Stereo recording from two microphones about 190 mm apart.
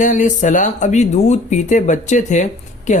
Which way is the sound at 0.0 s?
40° left (ahead or behind).